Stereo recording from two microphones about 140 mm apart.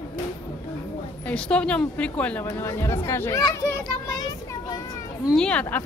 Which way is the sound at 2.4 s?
20° left (ahead or behind).